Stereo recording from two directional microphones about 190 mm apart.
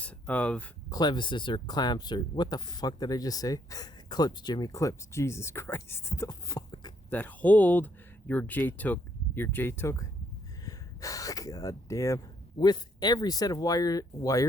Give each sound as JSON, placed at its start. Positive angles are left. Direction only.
{"t": 0.0, "sound": "speech", "side_deg": 5}
{"t": 0.9, "sound": "speech", "side_deg": 20}
{"t": 7.1, "sound": "speech", "side_deg": 10}